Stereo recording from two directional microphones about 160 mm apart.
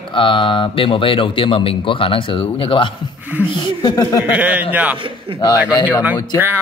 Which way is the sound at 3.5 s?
20° left (ahead or behind).